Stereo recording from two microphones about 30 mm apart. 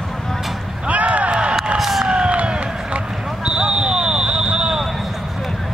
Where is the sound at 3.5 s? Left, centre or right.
Right.